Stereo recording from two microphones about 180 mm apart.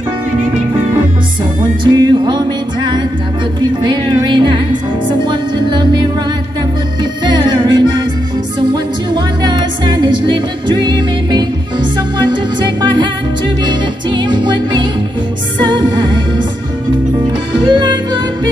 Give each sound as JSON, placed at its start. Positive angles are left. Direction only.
{"t": 1.9, "sound": "music", "side_deg": -25}
{"t": 7.2, "sound": "music", "side_deg": -25}
{"t": 9.1, "sound": "music", "side_deg": -25}
{"t": 17.6, "sound": "music", "side_deg": -25}